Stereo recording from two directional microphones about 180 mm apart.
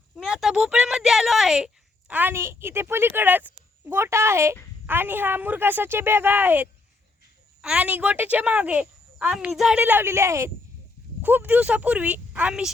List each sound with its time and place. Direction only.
0.2 s speech: centre (ahead or behind)